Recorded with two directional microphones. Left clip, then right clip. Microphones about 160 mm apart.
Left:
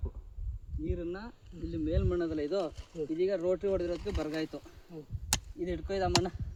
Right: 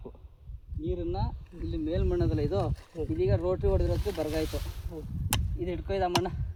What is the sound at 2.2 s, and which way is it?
Speech, 25° right (ahead or behind).